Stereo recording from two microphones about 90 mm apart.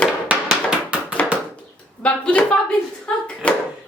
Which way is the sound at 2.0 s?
15° left (ahead or behind).